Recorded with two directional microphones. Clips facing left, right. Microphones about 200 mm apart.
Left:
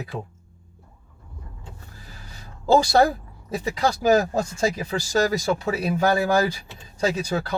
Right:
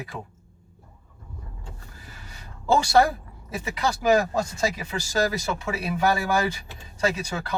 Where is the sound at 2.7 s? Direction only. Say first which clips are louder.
Left 2 dB; 35° left (ahead or behind).